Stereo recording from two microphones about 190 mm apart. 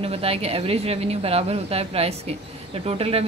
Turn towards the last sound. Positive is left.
turn(degrees=-30)  # may be behind; listen again after turning